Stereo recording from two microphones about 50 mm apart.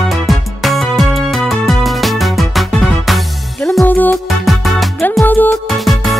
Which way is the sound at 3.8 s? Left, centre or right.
Left.